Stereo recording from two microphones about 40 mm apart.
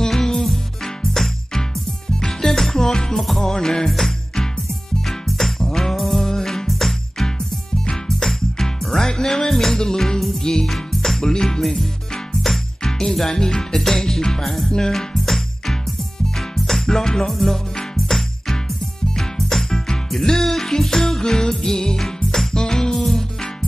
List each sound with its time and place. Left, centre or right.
0.0 s music: centre
10.7 s music: centre
17.3 s music: centre
22.9 s music: centre